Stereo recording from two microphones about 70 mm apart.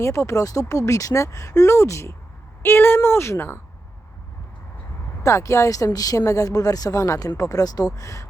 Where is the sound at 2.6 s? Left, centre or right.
Left.